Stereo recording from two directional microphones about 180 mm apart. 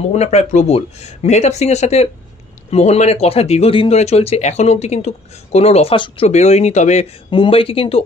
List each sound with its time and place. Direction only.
0.1 s speech: 40° left (ahead or behind)
7.2 s speech: 30° left (ahead or behind)